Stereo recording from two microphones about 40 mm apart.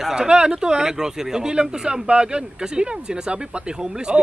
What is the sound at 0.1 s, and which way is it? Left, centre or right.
Speech, right.